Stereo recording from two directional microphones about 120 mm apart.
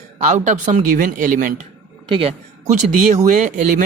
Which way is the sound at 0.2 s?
85° right.